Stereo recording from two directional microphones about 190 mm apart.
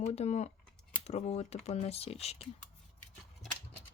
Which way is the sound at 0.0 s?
35° left (ahead or behind).